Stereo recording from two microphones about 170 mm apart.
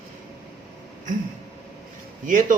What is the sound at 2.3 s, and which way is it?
Speech, 50° right (ahead or behind).